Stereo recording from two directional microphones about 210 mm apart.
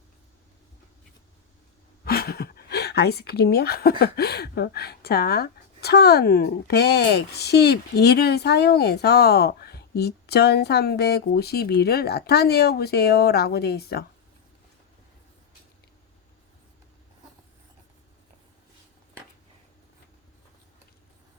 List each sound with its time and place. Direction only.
2.0 s speech: 45° left (ahead or behind)